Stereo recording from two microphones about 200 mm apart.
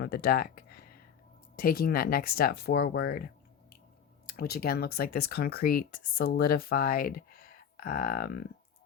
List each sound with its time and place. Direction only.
0.0 s a sound: 50° left (ahead or behind)
1.5 s speech: 45° left (ahead or behind)
4.3 s speech: 50° left (ahead or behind)